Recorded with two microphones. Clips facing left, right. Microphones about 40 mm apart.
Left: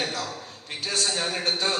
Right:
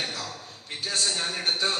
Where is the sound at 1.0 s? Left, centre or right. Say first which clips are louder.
Left 2 dB; left.